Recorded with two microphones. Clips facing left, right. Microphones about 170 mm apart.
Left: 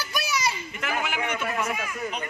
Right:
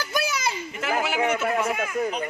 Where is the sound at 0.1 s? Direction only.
55° right (ahead or behind).